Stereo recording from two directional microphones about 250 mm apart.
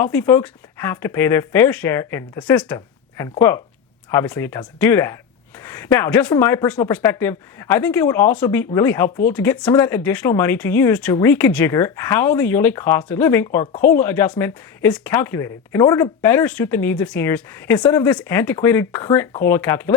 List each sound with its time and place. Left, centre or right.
0.0 s speech: centre
9.0 s speech: left
9.3 s speech: centre